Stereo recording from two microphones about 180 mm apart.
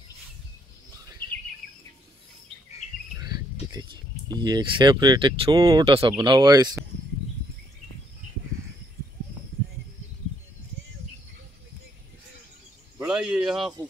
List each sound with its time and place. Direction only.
1.6 s bird: 5° left (ahead or behind)
3.7 s speech: 25° right (ahead or behind)
13.0 s cricket: 5° right (ahead or behind)